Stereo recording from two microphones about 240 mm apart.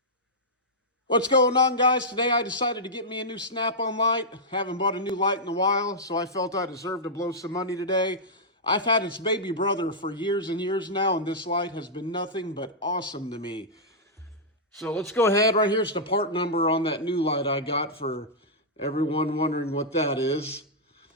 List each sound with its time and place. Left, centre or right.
1.3 s a man's voice: centre
14.8 s a man's voice: centre; by 20.6 s left